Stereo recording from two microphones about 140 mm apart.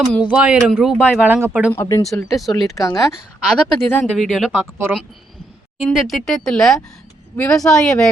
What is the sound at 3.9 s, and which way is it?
Speech, 5° left (ahead or behind).